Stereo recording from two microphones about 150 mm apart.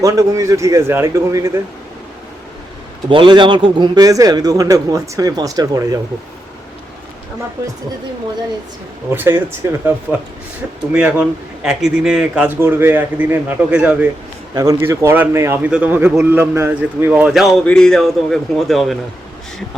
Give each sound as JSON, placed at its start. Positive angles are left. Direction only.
{"t": 0.0, "sound": "speech", "side_deg": -20}
{"t": 3.1, "sound": "speech", "side_deg": -30}
{"t": 7.6, "sound": "speech", "side_deg": -20}
{"t": 9.0, "sound": "a man's voice", "side_deg": -15}
{"t": 14.5, "sound": "a man's voice", "side_deg": -25}